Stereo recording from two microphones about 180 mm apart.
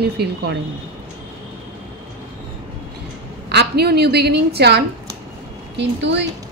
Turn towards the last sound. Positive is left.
turn(degrees=-75)  # may be behind; listen again after turning